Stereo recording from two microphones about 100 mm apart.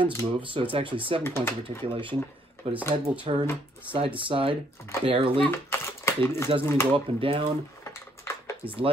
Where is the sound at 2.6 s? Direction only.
75° right (ahead or behind).